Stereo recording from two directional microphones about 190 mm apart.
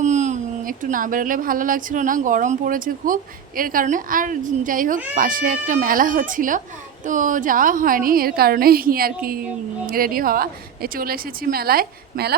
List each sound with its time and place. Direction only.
0.0 s speech: 40° right (ahead or behind); by 12.4 s 55° right (ahead or behind)